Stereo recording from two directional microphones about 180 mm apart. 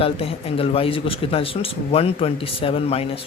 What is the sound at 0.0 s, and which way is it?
Speech, 30° left (ahead or behind).